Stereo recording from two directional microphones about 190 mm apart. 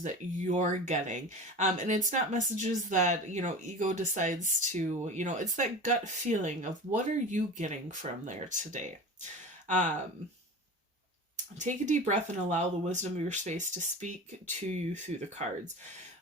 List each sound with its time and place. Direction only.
0.0 s speech: 40° right (ahead or behind)
11.6 s speech: 40° right (ahead or behind)